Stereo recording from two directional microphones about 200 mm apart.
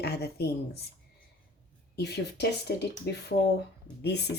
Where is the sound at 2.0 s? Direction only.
55° left (ahead or behind).